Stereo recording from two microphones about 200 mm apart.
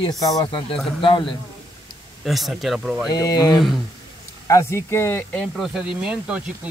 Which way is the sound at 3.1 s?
20° left (ahead or behind).